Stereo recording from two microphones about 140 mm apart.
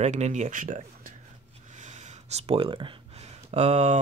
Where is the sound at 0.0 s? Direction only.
55° right (ahead or behind).